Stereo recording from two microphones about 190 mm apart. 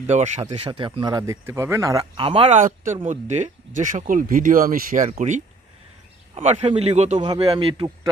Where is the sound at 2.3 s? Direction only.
30° right (ahead or behind).